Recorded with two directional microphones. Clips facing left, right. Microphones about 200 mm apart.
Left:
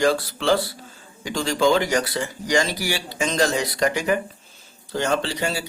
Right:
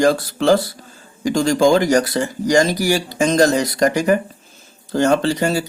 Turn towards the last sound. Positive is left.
turn(degrees=-45)  # may be behind; listen again after turning